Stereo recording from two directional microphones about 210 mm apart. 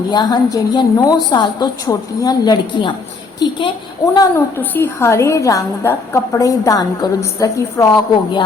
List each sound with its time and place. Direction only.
0.1 s a woman's voice: 20° left (ahead or behind)